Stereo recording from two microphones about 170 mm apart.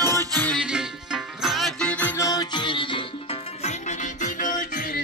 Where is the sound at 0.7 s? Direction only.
5° right (ahead or behind).